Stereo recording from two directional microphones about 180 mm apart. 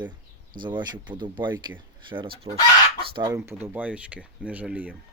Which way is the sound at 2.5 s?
35° right (ahead or behind).